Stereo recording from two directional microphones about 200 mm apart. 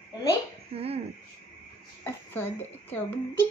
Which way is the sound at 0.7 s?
30° right (ahead or behind).